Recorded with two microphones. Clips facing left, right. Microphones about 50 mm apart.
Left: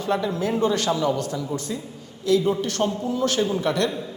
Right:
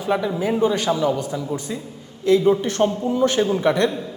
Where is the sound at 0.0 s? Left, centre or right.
Centre.